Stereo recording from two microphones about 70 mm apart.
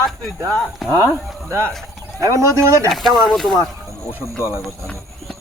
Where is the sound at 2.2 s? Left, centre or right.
Right.